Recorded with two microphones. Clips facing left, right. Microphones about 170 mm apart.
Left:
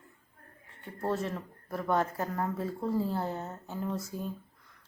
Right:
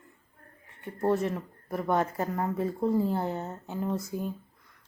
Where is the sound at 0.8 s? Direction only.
15° right (ahead or behind).